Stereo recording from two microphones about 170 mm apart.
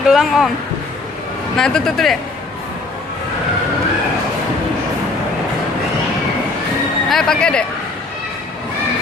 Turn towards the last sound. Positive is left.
turn(degrees=5)  # may be behind; listen again after turning